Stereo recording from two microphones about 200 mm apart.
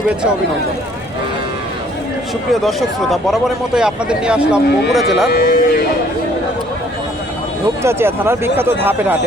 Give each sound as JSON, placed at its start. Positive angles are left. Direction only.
{"t": 2.5, "sound": "speech", "side_deg": 0}
{"t": 5.3, "sound": "speech", "side_deg": 50}
{"t": 7.8, "sound": "speech", "side_deg": -10}